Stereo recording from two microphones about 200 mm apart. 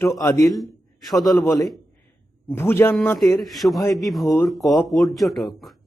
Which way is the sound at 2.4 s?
10° left (ahead or behind).